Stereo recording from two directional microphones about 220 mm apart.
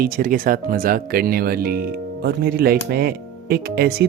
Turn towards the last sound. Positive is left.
turn(degrees=-45)  # may be behind; listen again after turning